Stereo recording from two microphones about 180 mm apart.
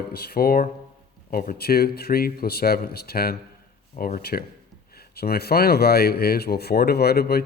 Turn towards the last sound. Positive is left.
turn(degrees=60)  # may be behind; listen again after turning